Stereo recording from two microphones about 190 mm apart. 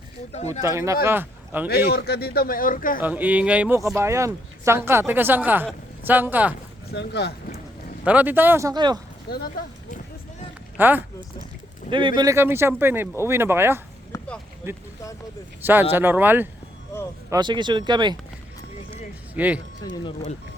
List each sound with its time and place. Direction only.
0.6 s speech: 15° right (ahead or behind)
1.7 s speech: 55° left (ahead or behind)
3.0 s speech: 10° right (ahead or behind)
6.9 s speech: 65° left (ahead or behind)
8.0 s speech: 10° right (ahead or behind)
9.3 s speech: 55° left (ahead or behind)
10.8 s speech: 10° right (ahead or behind)
11.9 s speech: 25° right (ahead or behind)
14.1 s a sound: 15° left (ahead or behind)
14.6 s speech: 10° right (ahead or behind)
17.2 s speech: 20° right (ahead or behind)
19.3 s speech: 10° right (ahead or behind)
19.8 s speech: 25° left (ahead or behind)